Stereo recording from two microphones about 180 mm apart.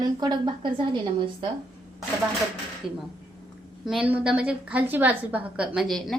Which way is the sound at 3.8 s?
5° right (ahead or behind).